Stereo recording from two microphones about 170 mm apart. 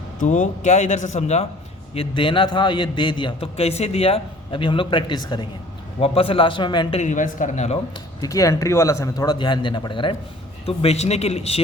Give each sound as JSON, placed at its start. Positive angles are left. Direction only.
{"t": 0.2, "sound": "speech", "side_deg": 50}
{"t": 2.0, "sound": "a man's voice", "side_deg": 30}
{"t": 7.0, "sound": "speech", "side_deg": 45}
{"t": 8.2, "sound": "a man's voice", "side_deg": 20}